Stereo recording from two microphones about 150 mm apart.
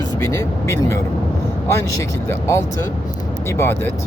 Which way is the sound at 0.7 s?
20° left (ahead or behind).